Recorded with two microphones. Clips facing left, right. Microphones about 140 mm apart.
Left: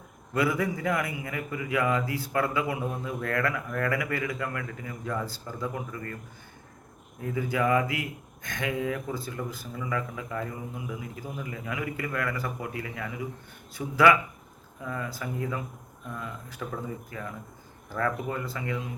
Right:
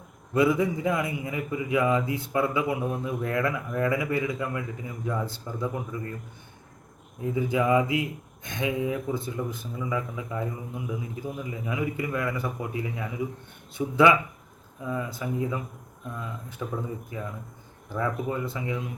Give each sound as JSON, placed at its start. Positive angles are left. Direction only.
{"t": 0.3, "sound": "a man's voice", "side_deg": -20}
{"t": 7.2, "sound": "a man's voice", "side_deg": -20}